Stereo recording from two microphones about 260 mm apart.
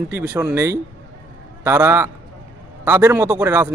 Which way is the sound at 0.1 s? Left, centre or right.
Centre.